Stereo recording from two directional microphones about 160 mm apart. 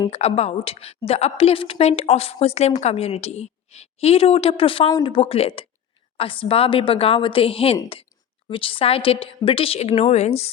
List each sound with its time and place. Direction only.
0.1 s a woman's voice: 40° left (ahead or behind)
4.9 s speech: 25° left (ahead or behind)
5.1 s a woman's voice: 35° left (ahead or behind)